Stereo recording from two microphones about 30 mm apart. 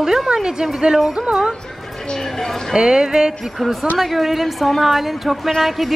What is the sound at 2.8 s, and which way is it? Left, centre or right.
Speech, right.